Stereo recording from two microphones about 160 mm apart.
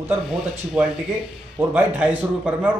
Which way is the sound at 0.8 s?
5° right (ahead or behind).